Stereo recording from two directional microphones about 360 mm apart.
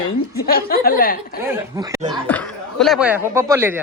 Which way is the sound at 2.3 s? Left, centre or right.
Centre.